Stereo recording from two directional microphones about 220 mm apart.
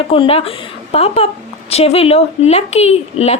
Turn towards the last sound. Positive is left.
turn(degrees=30)  # may be behind; listen again after turning